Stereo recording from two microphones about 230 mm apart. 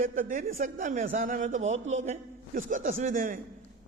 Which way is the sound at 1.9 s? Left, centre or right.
Right.